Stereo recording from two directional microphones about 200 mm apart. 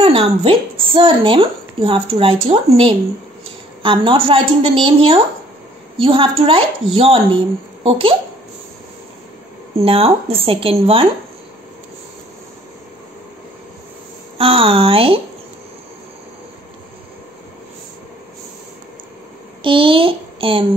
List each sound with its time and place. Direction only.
0.0 s a woman's voice: 30° right (ahead or behind)
9.8 s a woman's voice: 30° right (ahead or behind)
14.4 s a woman's voice: 30° right (ahead or behind)
19.6 s speech: 25° right (ahead or behind)